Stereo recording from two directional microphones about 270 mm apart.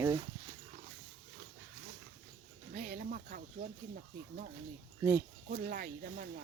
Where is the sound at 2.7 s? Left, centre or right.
Right.